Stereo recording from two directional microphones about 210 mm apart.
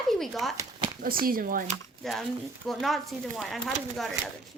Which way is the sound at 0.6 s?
20° right (ahead or behind).